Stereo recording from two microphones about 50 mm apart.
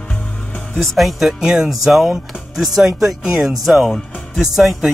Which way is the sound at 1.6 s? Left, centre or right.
Centre.